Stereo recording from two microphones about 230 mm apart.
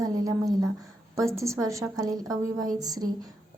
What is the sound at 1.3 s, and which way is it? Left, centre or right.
A woman's voice, centre.